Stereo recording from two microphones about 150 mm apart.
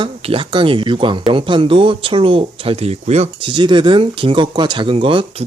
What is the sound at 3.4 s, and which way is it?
Speech, 30° right (ahead or behind).